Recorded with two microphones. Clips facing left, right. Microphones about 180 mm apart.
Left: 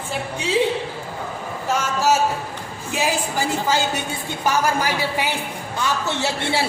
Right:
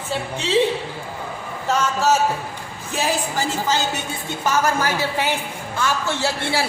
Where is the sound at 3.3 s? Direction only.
15° left (ahead or behind).